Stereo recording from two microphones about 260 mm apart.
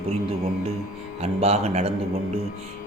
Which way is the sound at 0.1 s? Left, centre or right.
Right.